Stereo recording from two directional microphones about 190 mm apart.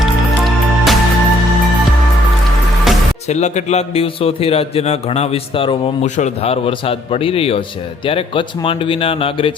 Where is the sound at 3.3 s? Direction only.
35° left (ahead or behind).